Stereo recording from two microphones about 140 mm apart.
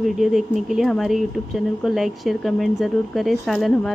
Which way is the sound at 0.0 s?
Centre (ahead or behind).